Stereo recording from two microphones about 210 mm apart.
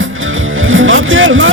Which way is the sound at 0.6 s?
70° right (ahead or behind).